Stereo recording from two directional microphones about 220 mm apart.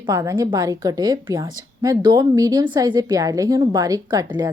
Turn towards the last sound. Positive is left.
turn(degrees=-15)  # may be behind; listen again after turning